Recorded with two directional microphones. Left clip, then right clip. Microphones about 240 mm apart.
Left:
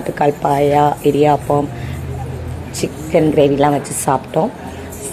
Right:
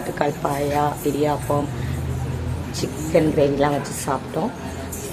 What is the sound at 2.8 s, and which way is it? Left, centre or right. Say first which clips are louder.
A woman's voice: left 4 dB; centre.